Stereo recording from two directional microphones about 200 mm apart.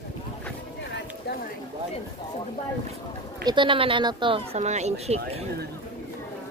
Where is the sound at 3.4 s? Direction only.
25° right (ahead or behind).